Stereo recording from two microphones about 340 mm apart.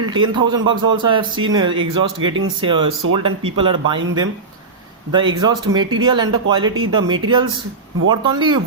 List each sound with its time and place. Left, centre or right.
0.0 s a man's voice: centre